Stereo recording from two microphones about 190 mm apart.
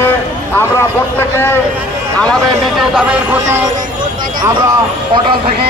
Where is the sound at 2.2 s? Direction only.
Centre (ahead or behind).